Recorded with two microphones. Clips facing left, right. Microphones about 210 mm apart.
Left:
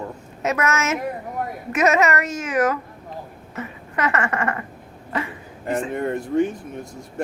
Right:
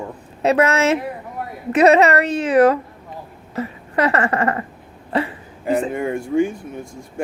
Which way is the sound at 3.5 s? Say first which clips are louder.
Right 7 dB; 35° right (ahead or behind).